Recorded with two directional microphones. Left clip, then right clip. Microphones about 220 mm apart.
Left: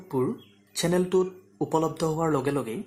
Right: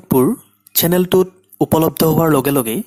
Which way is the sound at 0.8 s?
40° right (ahead or behind).